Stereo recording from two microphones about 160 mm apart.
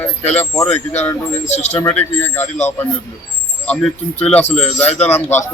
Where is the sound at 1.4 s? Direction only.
45° left (ahead or behind).